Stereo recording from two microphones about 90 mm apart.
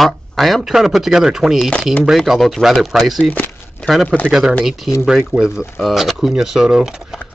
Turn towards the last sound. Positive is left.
turn(degrees=-5)  # may be behind; listen again after turning